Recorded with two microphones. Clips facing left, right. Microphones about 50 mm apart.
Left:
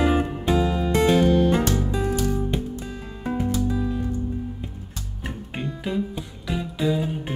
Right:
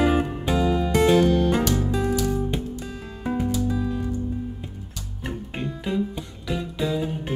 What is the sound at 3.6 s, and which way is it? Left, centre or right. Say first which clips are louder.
Music: even; centre.